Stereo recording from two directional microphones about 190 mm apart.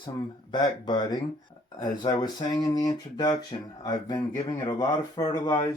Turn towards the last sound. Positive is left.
turn(degrees=20)  # may be behind; listen again after turning